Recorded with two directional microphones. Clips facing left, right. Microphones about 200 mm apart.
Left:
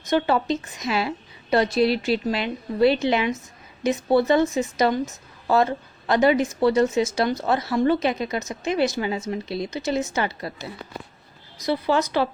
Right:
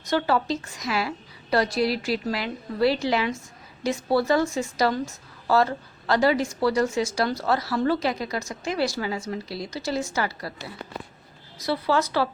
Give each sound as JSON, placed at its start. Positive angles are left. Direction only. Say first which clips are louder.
{"t": 0.1, "sound": "a woman's voice", "louder": "left 2 dB", "side_deg": 20}